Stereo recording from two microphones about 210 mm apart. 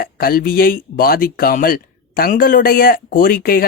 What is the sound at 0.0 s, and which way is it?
Speech, 45° left (ahead or behind).